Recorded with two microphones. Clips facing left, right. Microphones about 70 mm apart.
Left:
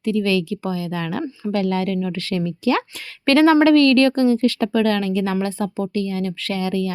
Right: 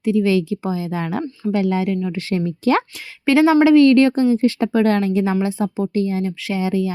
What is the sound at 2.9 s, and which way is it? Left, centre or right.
Speech, centre.